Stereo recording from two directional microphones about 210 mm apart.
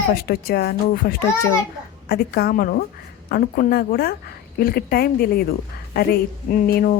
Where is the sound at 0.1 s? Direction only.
45° left (ahead or behind).